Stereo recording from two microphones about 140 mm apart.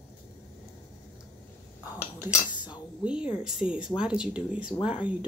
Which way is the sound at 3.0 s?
5° right (ahead or behind).